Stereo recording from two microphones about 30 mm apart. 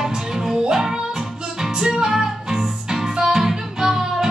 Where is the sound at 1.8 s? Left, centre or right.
Centre.